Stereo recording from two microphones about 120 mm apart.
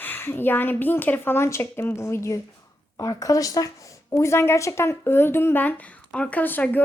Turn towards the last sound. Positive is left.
turn(degrees=15)  # may be behind; listen again after turning